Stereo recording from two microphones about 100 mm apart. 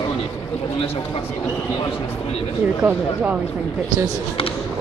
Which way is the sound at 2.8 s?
15° right (ahead or behind).